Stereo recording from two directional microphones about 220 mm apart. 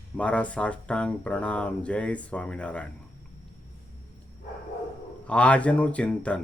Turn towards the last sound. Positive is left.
turn(degrees=5)  # may be behind; listen again after turning